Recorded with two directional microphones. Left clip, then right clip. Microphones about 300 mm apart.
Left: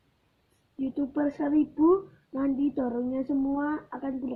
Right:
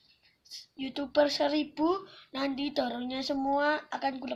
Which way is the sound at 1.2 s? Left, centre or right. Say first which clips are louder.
Right 1 dB; right.